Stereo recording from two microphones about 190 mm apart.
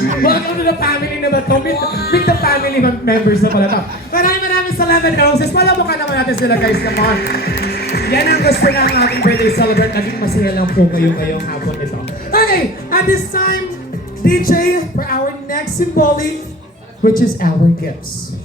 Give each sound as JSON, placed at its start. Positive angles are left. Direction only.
{"t": 0.2, "sound": "speech", "side_deg": 50}
{"t": 12.3, "sound": "a sound", "side_deg": 50}
{"t": 14.3, "sound": "a woman's voice", "side_deg": 50}